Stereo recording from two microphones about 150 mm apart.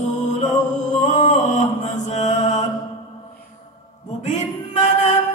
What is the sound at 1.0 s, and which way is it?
Mantra, 50° left (ahead or behind).